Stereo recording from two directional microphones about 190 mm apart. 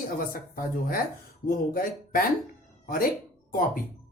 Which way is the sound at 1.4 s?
45° left (ahead or behind).